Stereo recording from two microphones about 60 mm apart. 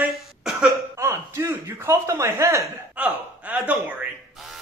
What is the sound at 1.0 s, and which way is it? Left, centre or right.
Speech, right.